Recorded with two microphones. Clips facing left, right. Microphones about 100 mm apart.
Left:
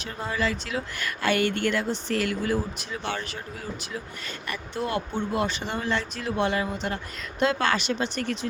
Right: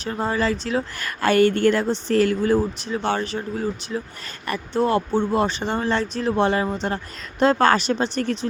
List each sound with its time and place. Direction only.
0.0 s speech: 35° right (ahead or behind)